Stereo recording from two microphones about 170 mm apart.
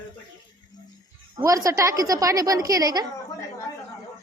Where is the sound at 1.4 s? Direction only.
20° right (ahead or behind).